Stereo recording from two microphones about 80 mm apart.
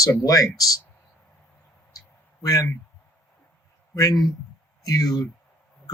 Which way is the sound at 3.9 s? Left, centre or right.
Left.